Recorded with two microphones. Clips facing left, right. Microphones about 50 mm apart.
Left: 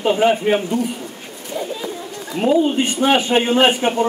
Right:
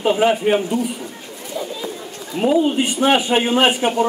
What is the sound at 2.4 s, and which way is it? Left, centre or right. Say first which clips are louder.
A man's voice: even; centre.